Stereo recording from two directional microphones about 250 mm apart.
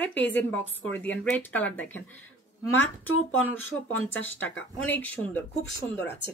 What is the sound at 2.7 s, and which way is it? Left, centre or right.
Speech, left.